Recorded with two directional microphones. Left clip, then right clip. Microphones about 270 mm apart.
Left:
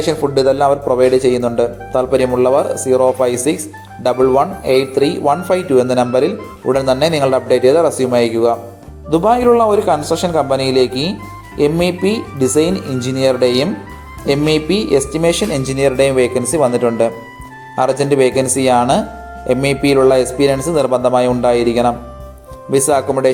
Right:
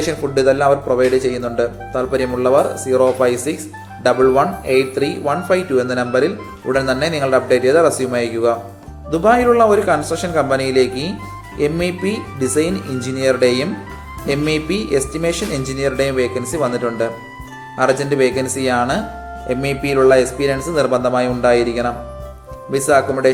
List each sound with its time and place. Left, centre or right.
0.3 s speech: centre
17.7 s speech: centre